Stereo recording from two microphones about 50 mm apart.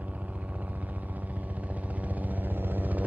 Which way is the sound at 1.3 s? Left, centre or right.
Right.